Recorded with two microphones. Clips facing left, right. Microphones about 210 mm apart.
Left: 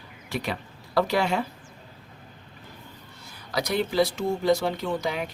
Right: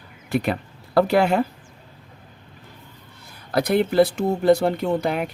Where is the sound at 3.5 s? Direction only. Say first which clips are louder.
Right 7 dB; 55° right (ahead or behind).